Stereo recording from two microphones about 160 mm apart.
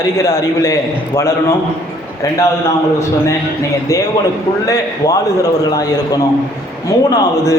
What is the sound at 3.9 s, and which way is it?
A man's voice, 20° left (ahead or behind).